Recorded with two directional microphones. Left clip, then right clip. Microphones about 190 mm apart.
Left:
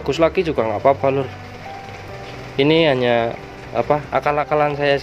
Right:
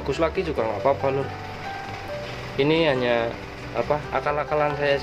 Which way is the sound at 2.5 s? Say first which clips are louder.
Left 6 dB; 35° left (ahead or behind).